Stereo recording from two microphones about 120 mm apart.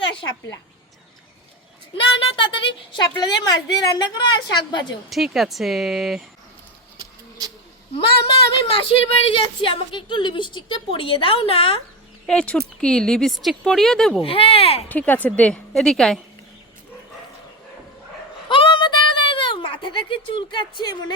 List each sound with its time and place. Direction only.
2.0 s a woman's voice: 45° left (ahead or behind)
5.0 s a woman's voice: centre (ahead or behind)
7.9 s a woman's voice: 55° left (ahead or behind)
12.2 s a woman's voice: 5° left (ahead or behind)
14.2 s a woman's voice: 50° left (ahead or behind)
14.8 s a woman's voice: 15° left (ahead or behind)
18.4 s a sound: 45° left (ahead or behind)
20.5 s a woman's voice: 40° left (ahead or behind)